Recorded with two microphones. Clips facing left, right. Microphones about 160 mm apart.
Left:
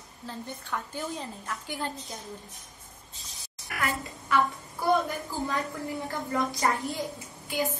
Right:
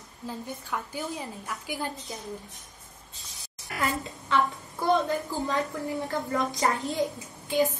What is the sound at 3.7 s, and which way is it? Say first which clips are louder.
Speech: right 2 dB; 25° right (ahead or behind).